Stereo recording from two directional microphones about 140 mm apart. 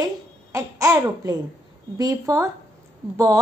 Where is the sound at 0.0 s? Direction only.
20° right (ahead or behind).